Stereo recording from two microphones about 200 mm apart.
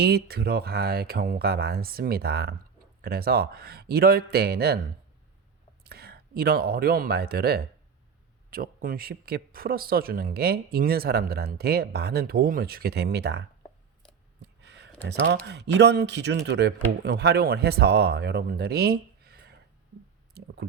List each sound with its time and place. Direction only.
0.0 s speech: 50° right (ahead or behind)
5.8 s speech: 50° right (ahead or behind)
15.4 s speech: 60° right (ahead or behind)